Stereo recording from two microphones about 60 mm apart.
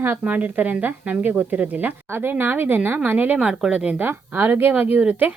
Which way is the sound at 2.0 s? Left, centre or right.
Right.